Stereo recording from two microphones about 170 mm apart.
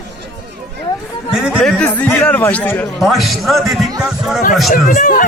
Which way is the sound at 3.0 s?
Centre (ahead or behind).